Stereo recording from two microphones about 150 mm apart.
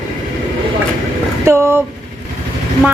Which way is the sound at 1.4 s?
20° right (ahead or behind).